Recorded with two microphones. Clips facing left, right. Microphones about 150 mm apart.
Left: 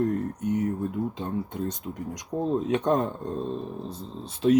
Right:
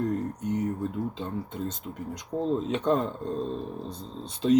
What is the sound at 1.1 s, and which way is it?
Speech, 15° left (ahead or behind).